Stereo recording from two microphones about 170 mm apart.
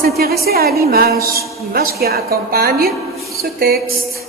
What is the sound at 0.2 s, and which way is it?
A woman's voice, 65° right (ahead or behind).